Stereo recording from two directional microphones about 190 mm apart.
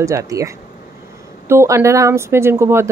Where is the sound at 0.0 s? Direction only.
15° right (ahead or behind).